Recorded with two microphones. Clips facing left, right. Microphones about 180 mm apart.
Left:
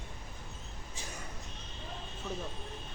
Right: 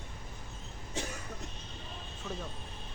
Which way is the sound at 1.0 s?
70° right (ahead or behind).